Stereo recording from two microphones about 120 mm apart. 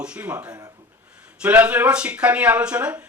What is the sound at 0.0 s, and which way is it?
A man's voice, 10° right (ahead or behind).